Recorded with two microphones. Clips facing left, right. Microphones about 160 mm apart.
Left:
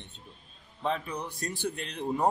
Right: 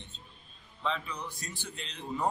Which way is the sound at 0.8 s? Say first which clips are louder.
Left 3 dB; 50° left (ahead or behind).